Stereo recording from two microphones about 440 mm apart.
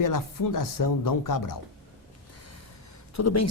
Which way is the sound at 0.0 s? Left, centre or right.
Left.